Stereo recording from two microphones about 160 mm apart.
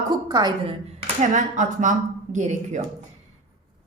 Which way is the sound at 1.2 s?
50° right (ahead or behind).